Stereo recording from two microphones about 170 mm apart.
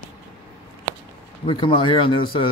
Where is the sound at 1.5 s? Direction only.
30° left (ahead or behind).